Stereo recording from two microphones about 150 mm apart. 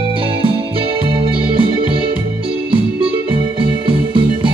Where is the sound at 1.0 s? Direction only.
35° right (ahead or behind).